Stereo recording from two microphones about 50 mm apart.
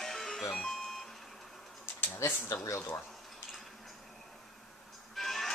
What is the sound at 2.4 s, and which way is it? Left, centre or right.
Speech, left.